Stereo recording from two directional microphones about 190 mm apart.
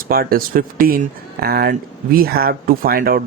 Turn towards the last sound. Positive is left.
turn(degrees=-50)  # may be behind; listen again after turning